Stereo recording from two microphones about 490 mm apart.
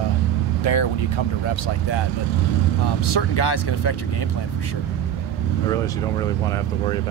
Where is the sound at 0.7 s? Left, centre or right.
Left.